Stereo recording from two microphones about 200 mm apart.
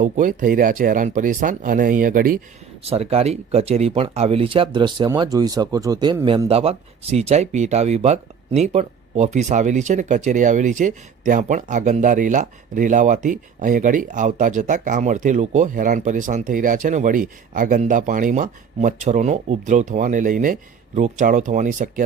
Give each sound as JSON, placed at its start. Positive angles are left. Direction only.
{"t": 0.0, "sound": "speech", "side_deg": -40}
{"t": 2.8, "sound": "speech", "side_deg": -30}